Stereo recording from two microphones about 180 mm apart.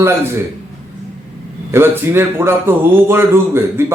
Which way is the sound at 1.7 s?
15° right (ahead or behind).